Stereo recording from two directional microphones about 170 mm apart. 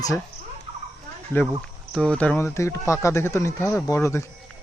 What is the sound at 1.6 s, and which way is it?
Speech, 5° left (ahead or behind).